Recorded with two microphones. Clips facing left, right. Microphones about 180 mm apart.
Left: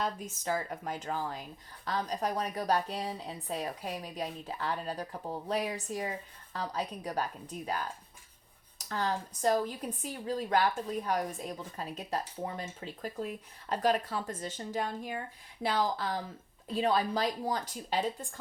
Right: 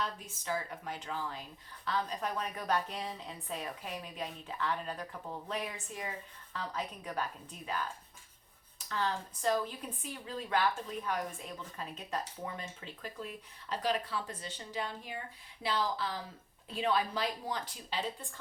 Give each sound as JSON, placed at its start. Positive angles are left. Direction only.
{"t": 0.0, "sound": "speech", "side_deg": 45}
{"t": 8.8, "sound": "speech", "side_deg": 40}